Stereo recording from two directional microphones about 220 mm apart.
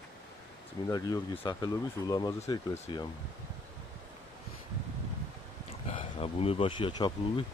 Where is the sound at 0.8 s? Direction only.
15° left (ahead or behind).